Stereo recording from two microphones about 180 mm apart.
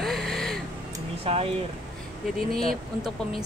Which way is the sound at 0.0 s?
Centre (ahead or behind).